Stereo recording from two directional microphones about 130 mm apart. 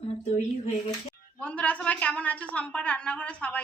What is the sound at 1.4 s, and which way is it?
A woman's voice, 10° left (ahead or behind).